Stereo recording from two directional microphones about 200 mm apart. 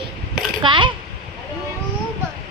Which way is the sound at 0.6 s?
25° right (ahead or behind).